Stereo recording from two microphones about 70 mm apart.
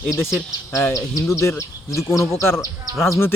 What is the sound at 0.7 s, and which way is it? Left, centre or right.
Speech, left.